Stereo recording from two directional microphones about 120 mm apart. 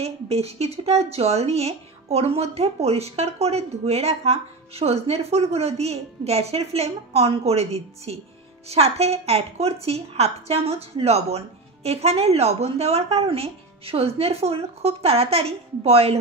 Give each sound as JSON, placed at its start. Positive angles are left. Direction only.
{"t": 0.0, "sound": "speech", "side_deg": -60}